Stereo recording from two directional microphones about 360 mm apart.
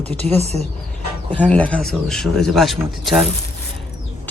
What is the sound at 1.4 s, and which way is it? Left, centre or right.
Speech, centre.